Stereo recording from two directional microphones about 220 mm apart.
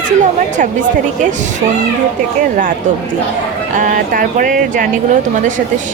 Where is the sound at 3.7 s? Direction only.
35° right (ahead or behind).